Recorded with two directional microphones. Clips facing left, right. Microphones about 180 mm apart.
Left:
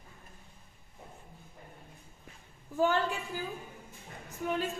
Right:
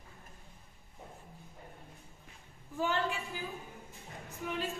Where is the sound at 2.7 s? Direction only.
35° left (ahead or behind).